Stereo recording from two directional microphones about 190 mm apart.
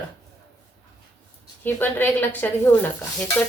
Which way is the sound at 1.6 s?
10° left (ahead or behind).